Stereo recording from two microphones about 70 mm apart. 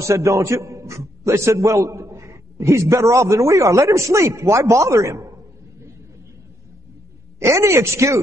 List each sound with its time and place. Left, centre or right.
0.0 s a man's voice: right
7.3 s speech: right